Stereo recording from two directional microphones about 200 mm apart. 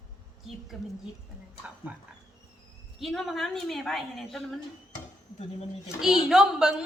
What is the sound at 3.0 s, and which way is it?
A woman's voice, centre (ahead or behind).